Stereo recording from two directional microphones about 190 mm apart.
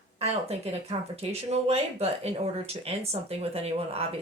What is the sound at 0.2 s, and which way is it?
Speech, 35° right (ahead or behind).